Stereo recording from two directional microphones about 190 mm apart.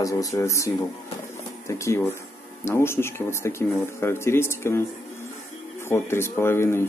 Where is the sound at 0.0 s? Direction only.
15° left (ahead or behind).